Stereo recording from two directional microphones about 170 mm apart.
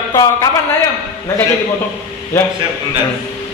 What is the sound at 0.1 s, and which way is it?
Speech, 20° left (ahead or behind).